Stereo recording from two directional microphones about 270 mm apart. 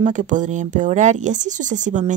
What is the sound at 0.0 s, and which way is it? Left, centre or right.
A woman's voice, right.